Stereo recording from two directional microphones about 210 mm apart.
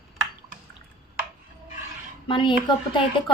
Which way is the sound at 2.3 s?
25° left (ahead or behind).